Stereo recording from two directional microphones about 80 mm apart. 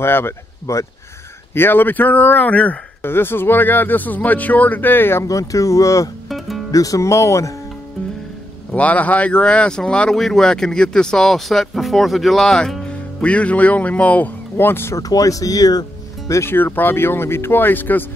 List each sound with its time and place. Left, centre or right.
0.0 s speech: left
5.2 s speech: left
6.2 s music: centre
6.7 s speech: left
8.7 s speech: centre
15.0 s speech: left
16.3 s speech: left
16.5 s speech: left